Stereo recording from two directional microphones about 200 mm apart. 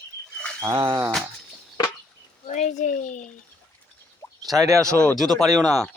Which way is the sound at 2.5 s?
35° left (ahead or behind).